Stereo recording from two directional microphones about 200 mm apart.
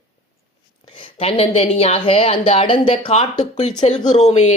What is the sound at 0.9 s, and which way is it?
A woman's voice, 25° left (ahead or behind).